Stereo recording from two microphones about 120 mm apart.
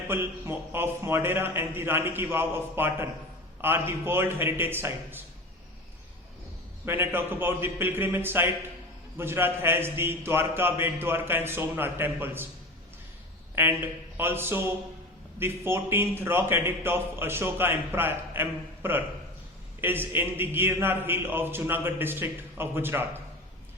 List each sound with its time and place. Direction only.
0.1 s a man's voice: 20° right (ahead or behind)
6.8 s a man's voice: 20° right (ahead or behind)
13.6 s a man's voice: 15° right (ahead or behind)